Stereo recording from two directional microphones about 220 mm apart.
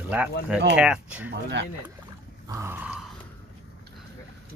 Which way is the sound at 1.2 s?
55° right (ahead or behind).